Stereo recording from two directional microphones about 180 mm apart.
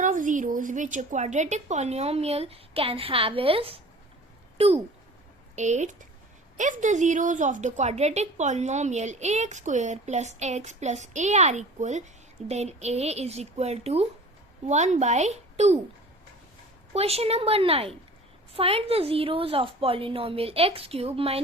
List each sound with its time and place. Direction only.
0.0 s a woman's voice: 45° right (ahead or behind)
16.9 s a woman's voice: 35° right (ahead or behind)